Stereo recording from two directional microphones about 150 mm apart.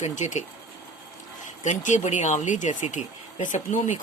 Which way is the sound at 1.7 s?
55° left (ahead or behind).